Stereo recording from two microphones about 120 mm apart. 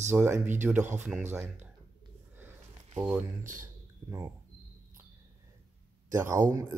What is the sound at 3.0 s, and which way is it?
Speech, 15° right (ahead or behind).